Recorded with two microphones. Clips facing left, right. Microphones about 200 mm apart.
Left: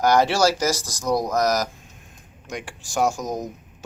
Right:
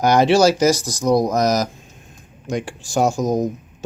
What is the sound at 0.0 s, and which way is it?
Speech, 20° right (ahead or behind).